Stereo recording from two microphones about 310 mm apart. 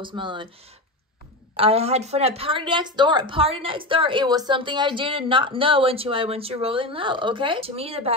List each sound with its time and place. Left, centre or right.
0.0 s speech: centre
1.6 s speech: centre